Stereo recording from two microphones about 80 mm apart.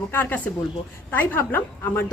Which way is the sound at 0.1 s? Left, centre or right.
Left.